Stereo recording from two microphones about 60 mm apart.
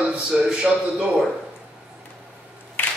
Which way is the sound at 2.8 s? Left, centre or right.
Left.